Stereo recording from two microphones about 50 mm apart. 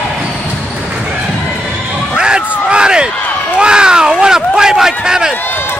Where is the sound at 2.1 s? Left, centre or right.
Centre.